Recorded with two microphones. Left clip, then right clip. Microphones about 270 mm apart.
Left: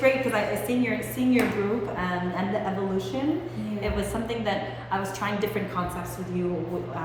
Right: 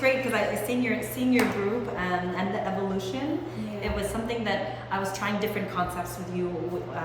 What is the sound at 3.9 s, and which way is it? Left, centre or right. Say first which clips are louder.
A woman's voice: even; centre.